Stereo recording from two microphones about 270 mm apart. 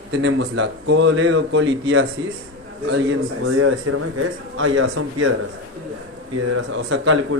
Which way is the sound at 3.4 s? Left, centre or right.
Right.